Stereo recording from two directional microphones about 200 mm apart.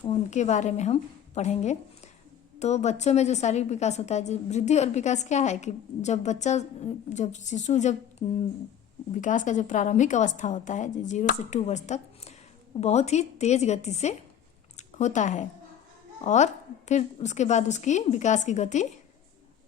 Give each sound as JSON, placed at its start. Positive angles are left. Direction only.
{"t": 0.0, "sound": "a woman's voice", "side_deg": 35}
{"t": 9.1, "sound": "a woman's voice", "side_deg": 40}